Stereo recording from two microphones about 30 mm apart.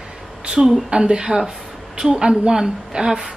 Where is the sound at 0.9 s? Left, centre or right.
Right.